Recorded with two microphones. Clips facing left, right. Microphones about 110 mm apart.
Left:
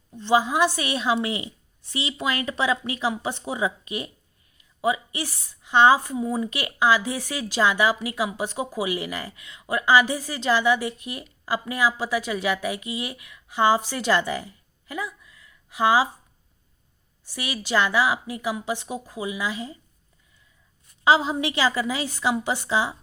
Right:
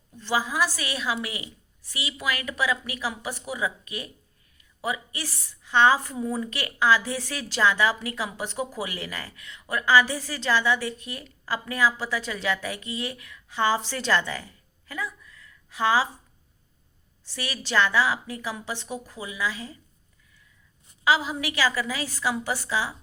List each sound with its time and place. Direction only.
0.2 s a woman's voice: 20° left (ahead or behind)
17.2 s a woman's voice: 15° left (ahead or behind)
21.0 s a woman's voice: 25° left (ahead or behind)